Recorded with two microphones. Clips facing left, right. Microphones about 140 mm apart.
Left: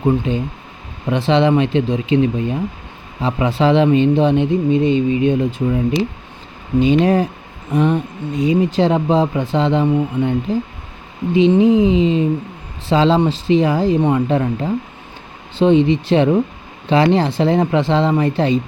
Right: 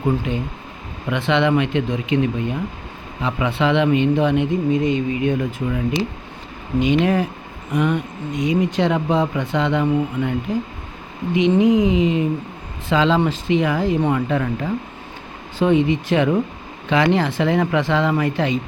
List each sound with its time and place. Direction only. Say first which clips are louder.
0.3 s speech: left 4 dB; 35° left (ahead or behind)